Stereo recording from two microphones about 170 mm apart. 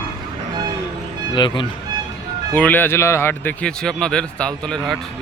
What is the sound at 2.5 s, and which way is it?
A man's voice, 10° left (ahead or behind).